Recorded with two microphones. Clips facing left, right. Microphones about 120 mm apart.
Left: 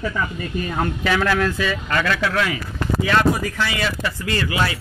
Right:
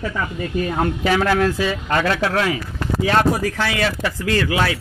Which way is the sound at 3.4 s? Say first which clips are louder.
Right 3 dB; 65° right (ahead or behind).